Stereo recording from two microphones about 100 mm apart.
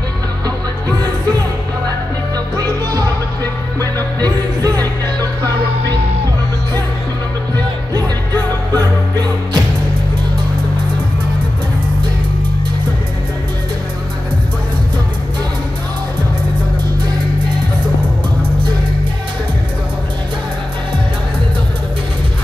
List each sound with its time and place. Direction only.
2.3 s music: 40° right (ahead or behind)
8.7 s music: 45° right (ahead or behind)